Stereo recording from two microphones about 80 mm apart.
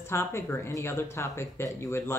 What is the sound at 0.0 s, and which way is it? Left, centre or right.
Speech, left.